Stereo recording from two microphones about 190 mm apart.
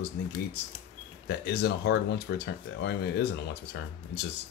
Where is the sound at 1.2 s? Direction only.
60° left (ahead or behind).